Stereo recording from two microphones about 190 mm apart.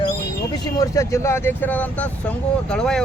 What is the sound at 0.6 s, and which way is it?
Speech, 20° left (ahead or behind).